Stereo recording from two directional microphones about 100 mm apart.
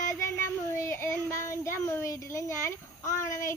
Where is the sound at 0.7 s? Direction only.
25° left (ahead or behind).